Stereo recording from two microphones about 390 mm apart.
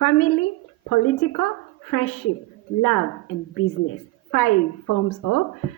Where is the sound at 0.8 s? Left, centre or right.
Left.